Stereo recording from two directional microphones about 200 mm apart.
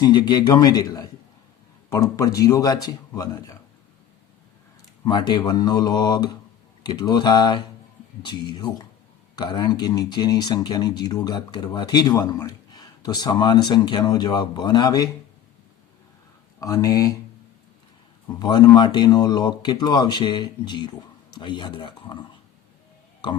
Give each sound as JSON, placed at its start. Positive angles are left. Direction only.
{"t": 0.0, "sound": "speech", "side_deg": 20}
{"t": 5.0, "sound": "speech", "side_deg": 20}
{"t": 16.6, "sound": "speech", "side_deg": 15}
{"t": 18.3, "sound": "speech", "side_deg": 20}